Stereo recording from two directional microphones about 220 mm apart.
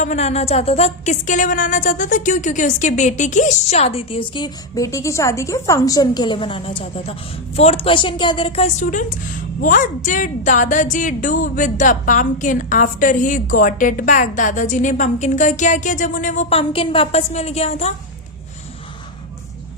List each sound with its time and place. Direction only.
0.0 s a woman's voice: 30° left (ahead or behind)